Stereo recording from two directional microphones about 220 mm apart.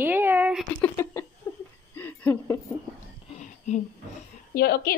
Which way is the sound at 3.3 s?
30° left (ahead or behind).